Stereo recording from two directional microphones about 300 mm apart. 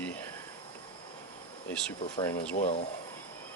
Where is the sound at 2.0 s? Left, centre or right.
Centre.